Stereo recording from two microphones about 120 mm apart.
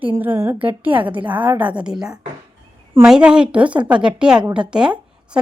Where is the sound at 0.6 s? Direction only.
15° right (ahead or behind).